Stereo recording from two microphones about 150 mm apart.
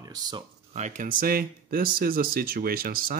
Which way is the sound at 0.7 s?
50° right (ahead or behind).